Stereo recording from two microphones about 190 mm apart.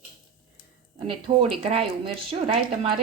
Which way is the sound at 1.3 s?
30° right (ahead or behind).